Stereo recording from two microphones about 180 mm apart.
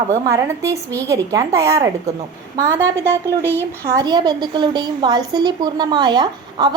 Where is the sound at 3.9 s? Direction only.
25° right (ahead or behind).